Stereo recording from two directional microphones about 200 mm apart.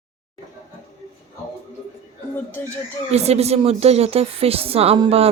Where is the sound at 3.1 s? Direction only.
30° right (ahead or behind).